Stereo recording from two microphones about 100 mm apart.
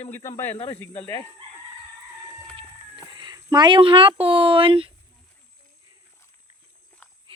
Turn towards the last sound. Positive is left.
turn(degrees=15)  # may be behind; listen again after turning